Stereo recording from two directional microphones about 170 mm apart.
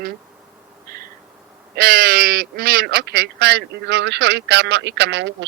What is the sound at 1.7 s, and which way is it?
Speech, 60° right (ahead or behind).